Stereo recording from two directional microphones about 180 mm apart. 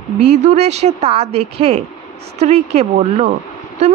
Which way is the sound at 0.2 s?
40° right (ahead or behind).